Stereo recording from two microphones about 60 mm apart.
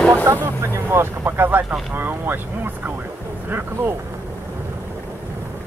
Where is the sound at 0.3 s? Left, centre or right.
Right.